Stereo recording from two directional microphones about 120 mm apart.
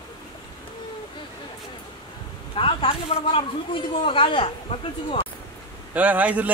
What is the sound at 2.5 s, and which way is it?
Speech, 50° left (ahead or behind).